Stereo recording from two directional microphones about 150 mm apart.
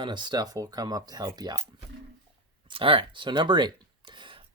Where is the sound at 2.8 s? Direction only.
35° right (ahead or behind).